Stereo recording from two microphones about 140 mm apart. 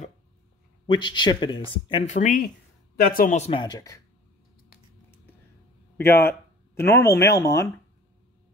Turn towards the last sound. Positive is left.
turn(degrees=20)  # may be behind; listen again after turning